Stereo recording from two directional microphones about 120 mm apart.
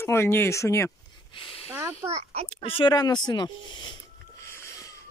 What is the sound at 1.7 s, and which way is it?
Speech, 20° right (ahead or behind).